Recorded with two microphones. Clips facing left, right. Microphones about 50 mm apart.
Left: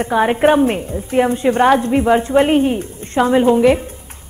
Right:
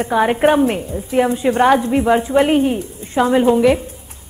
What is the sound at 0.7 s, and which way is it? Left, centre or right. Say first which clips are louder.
Speech: left 1 dB; centre.